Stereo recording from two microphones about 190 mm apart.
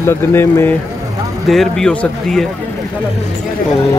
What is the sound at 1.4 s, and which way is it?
Speech, centre (ahead or behind).